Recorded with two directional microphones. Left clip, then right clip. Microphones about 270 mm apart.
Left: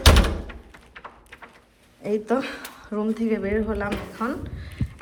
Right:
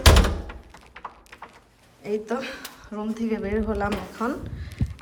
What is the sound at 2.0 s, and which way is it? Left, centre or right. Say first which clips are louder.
Speech: left 4 dB; centre.